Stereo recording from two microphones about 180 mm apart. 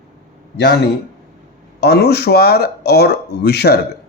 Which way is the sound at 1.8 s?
65° left (ahead or behind).